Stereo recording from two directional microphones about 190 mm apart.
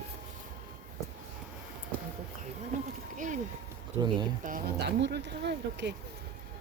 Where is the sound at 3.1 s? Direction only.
40° right (ahead or behind).